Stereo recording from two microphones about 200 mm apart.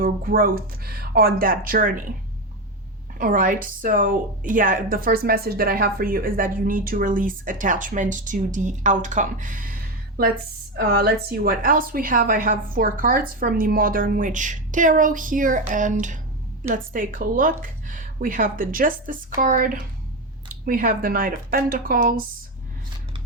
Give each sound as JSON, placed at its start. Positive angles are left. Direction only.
{"t": 0.0, "sound": "a woman's voice", "side_deg": -45}
{"t": 3.2, "sound": "a woman's voice", "side_deg": -45}
{"t": 10.8, "sound": "a woman's voice", "side_deg": -50}